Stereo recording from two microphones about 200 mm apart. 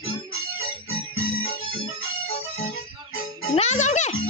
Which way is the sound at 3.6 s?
35° left (ahead or behind).